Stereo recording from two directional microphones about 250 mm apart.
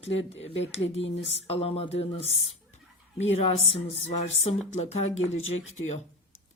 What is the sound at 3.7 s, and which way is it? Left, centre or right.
Speech, left.